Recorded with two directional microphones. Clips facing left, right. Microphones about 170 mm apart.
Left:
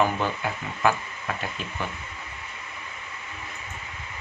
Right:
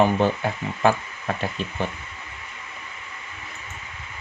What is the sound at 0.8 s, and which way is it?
Speech, 30° right (ahead or behind).